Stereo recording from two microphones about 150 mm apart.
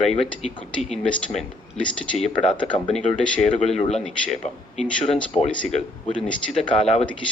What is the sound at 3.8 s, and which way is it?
Speech, 45° left (ahead or behind).